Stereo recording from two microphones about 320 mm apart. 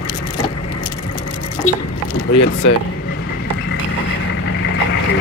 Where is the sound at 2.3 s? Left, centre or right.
Left.